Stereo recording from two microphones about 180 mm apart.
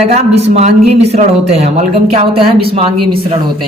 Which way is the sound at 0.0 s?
35° right (ahead or behind).